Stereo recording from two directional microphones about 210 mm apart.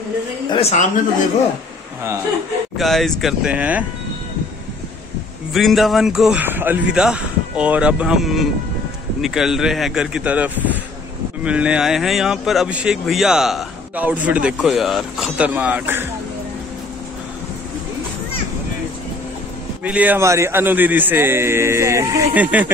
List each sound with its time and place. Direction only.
0.5 s a woman's voice: 30° left (ahead or behind)
2.8 s speech: centre (ahead or behind)
5.5 s speech: centre (ahead or behind)
19.8 s a man's voice: 5° right (ahead or behind)